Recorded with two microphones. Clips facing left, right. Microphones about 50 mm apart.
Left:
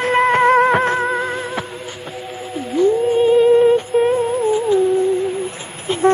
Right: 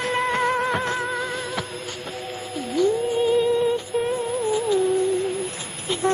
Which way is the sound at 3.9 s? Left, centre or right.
Left.